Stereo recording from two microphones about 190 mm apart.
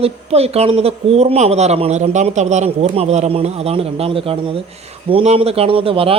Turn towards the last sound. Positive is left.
turn(degrees=-30)  # may be behind; listen again after turning